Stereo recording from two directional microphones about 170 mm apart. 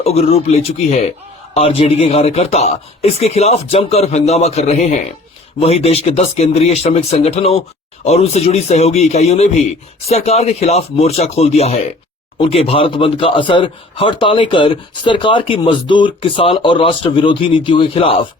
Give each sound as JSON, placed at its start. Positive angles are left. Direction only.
{"t": 0.0, "sound": "speech", "side_deg": 35}